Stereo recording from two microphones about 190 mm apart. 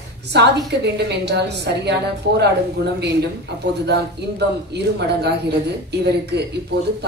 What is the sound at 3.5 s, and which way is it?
Speech, 60° right (ahead or behind).